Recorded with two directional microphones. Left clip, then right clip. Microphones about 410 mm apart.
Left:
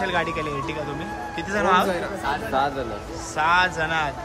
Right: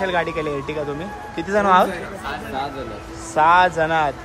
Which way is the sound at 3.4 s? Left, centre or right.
Centre.